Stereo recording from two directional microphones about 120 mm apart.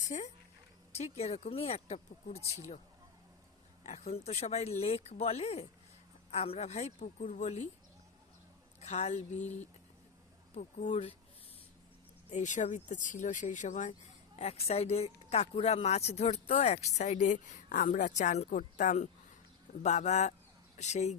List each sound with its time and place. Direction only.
0.0 s speech: 90° left
0.9 s speech: 60° left (ahead or behind)
3.8 s a woman's voice: 65° left (ahead or behind)
8.8 s a woman's voice: 65° left (ahead or behind)
12.3 s speech: 85° left
14.3 s speech: 60° left (ahead or behind); by 19.0 s 80° left
19.8 s a woman's voice: 70° left (ahead or behind)